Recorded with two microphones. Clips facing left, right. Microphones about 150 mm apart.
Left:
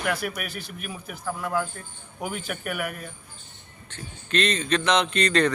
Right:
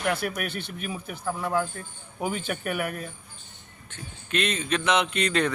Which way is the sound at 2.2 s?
5° left (ahead or behind).